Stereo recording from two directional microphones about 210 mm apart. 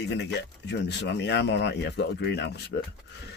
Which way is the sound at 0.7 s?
55° left (ahead or behind).